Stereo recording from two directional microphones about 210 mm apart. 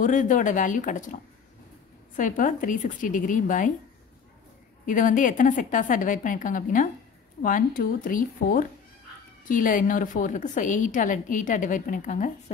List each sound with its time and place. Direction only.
0.0 s a woman's voice: 40° left (ahead or behind)
4.8 s a woman's voice: 40° left (ahead or behind)